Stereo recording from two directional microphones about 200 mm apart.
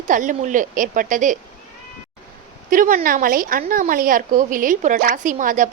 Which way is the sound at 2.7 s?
45° right (ahead or behind).